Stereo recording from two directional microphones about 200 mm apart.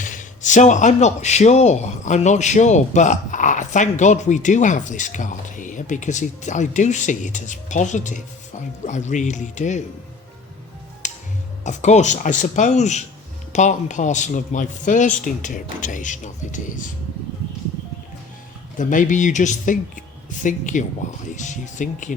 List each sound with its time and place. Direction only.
0.0 s speech: 40° left (ahead or behind)
11.0 s music: 35° left (ahead or behind)
11.6 s speech: 35° left (ahead or behind)
18.8 s speech: 40° left (ahead or behind)